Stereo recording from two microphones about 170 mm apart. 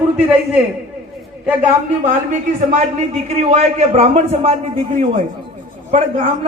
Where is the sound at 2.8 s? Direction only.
40° right (ahead or behind).